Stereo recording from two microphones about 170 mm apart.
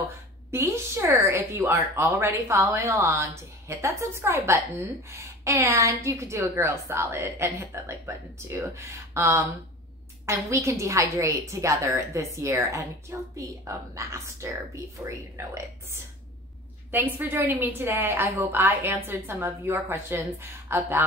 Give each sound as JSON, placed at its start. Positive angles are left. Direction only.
{"t": 0.5, "sound": "a woman's voice", "side_deg": -15}